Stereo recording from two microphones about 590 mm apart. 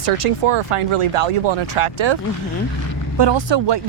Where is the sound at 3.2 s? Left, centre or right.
Right.